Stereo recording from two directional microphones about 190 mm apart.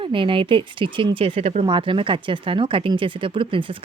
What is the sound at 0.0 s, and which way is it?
Speech, 25° right (ahead or behind).